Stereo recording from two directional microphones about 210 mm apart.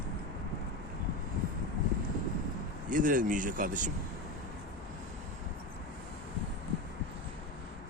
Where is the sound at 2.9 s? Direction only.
40° right (ahead or behind).